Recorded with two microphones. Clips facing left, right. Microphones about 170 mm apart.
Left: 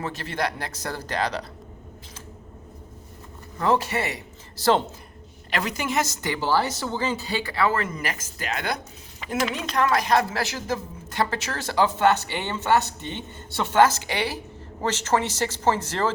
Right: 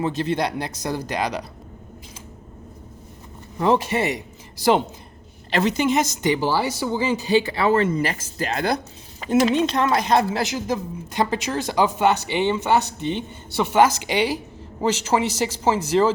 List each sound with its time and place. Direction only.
0.0 s speech: 20° right (ahead or behind)
3.6 s speech: 20° right (ahead or behind)
5.5 s speech: 25° right (ahead or behind)